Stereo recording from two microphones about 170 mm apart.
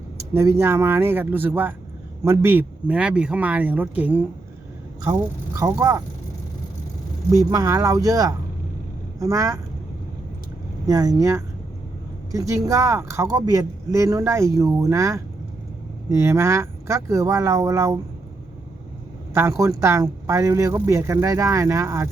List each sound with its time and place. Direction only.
0.3 s speech: 15° right (ahead or behind)
5.5 s speech: 20° right (ahead or behind)
7.3 s speech: 20° right (ahead or behind)
10.8 s speech: 20° right (ahead or behind)
19.3 s speech: 15° right (ahead or behind)